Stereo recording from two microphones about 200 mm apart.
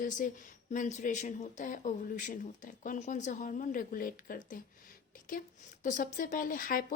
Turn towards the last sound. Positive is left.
turn(degrees=45)  # may be behind; listen again after turning